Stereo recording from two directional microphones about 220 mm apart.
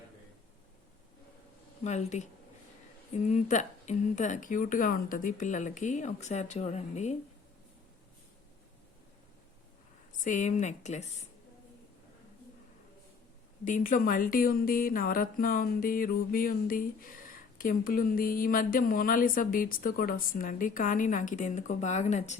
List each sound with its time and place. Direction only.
1.8 s speech: 30° left (ahead or behind)
3.2 s speech: 35° left (ahead or behind)
10.1 s a woman's voice: 35° left (ahead or behind)
13.7 s speech: 35° left (ahead or behind)